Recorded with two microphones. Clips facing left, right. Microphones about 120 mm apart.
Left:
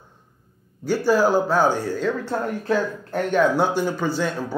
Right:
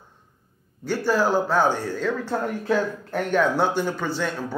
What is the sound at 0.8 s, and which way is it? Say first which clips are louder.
A man's voice: left 3 dB; 5° left (ahead or behind).